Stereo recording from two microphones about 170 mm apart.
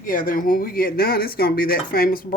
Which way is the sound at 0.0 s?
55° left (ahead or behind).